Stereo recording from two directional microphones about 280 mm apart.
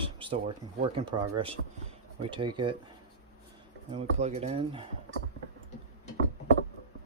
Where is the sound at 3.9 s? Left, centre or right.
Right.